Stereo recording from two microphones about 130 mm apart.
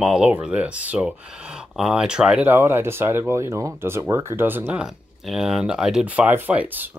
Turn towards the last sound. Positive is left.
turn(degrees=-15)  # may be behind; listen again after turning